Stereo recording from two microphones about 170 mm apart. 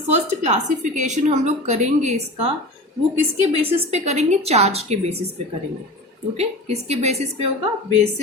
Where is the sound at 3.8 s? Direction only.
40° right (ahead or behind).